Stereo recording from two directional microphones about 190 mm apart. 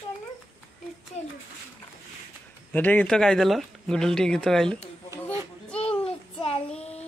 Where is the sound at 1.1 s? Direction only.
35° left (ahead or behind).